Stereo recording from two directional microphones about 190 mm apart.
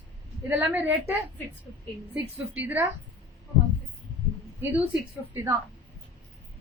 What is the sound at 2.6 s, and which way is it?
Speech, 10° right (ahead or behind).